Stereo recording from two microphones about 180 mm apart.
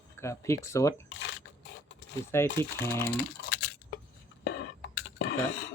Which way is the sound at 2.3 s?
15° left (ahead or behind).